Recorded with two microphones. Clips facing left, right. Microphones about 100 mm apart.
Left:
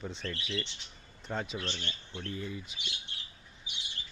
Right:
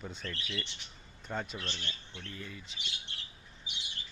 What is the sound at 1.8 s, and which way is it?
Speech, 25° left (ahead or behind).